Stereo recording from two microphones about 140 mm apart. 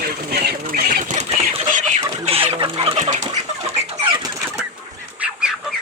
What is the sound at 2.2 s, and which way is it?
Chicken, 45° right (ahead or behind).